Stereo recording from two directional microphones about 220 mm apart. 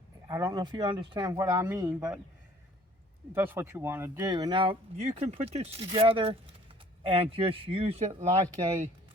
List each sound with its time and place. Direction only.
0.3 s speech: 15° right (ahead or behind)
3.3 s speech: 10° right (ahead or behind); by 8.3 s 30° right (ahead or behind)